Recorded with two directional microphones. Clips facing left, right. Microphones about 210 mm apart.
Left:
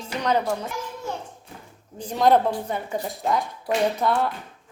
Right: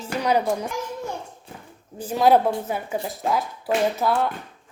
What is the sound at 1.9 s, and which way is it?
A woman's voice, 5° right (ahead or behind).